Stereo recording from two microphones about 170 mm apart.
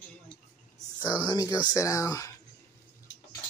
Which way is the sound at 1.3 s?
20° left (ahead or behind).